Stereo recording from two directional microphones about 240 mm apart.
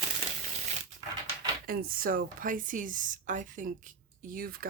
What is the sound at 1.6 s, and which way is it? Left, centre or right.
Speech, right.